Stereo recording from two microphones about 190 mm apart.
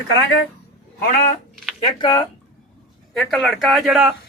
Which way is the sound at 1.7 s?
20° left (ahead or behind).